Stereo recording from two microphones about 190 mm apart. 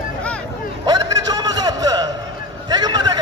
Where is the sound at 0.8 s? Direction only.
20° right (ahead or behind).